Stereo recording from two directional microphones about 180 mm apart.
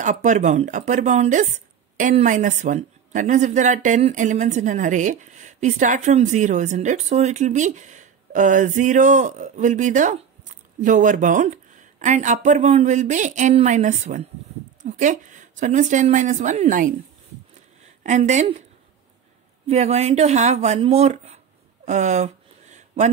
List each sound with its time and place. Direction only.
0.0 s speech: 45° right (ahead or behind)
18.0 s speech: 40° right (ahead or behind)
19.7 s speech: 35° right (ahead or behind)
21.8 s a sound: 40° right (ahead or behind)